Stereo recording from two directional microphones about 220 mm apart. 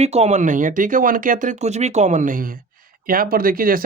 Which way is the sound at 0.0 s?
30° right (ahead or behind).